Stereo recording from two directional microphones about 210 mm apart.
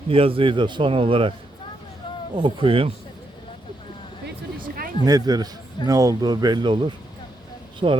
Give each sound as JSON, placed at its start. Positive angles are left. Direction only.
{"t": 0.1, "sound": "a man's voice", "side_deg": -25}
{"t": 2.3, "sound": "a man's voice", "side_deg": -25}
{"t": 4.7, "sound": "a sound", "side_deg": -45}
{"t": 5.0, "sound": "a man's voice", "side_deg": -15}